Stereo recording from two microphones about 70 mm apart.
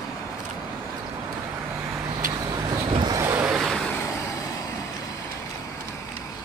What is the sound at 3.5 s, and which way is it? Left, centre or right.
Vehicle, centre.